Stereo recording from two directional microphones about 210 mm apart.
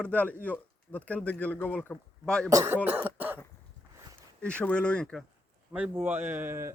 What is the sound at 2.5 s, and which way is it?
Speech, 15° right (ahead or behind).